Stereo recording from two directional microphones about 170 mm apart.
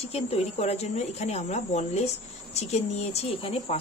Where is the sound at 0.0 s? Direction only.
35° left (ahead or behind).